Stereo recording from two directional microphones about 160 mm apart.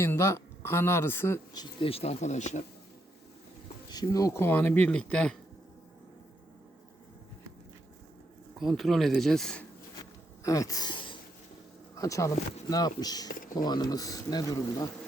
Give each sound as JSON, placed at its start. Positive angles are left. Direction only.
{"t": 0.0, "sound": "speech", "side_deg": 15}
{"t": 1.5, "sound": "speech", "side_deg": 35}
{"t": 3.8, "sound": "speech", "side_deg": 25}
{"t": 8.5, "sound": "speech", "side_deg": 0}
{"t": 10.4, "sound": "a sound", "side_deg": 20}
{"t": 11.9, "sound": "speech", "side_deg": 20}
{"t": 13.4, "sound": "a sound", "side_deg": 60}
{"t": 13.7, "sound": "speech", "side_deg": 25}